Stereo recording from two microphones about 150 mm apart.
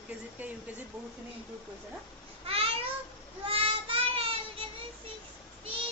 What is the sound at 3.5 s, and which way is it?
Child singing, 40° right (ahead or behind).